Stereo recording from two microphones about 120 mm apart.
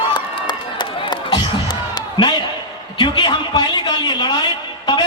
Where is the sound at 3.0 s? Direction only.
40° left (ahead or behind).